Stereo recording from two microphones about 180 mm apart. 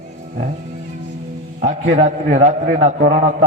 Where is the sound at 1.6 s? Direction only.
45° right (ahead or behind).